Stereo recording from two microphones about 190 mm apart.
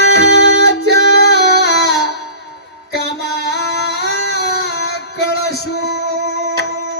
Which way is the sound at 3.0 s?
60° left (ahead or behind).